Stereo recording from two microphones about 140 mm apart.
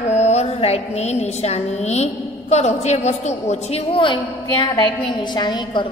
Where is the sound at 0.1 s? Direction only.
50° left (ahead or behind).